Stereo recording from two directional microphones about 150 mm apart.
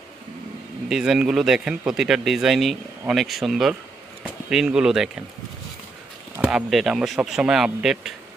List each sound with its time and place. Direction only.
0.9 s speech: 5° right (ahead or behind)
6.7 s speech: centre (ahead or behind)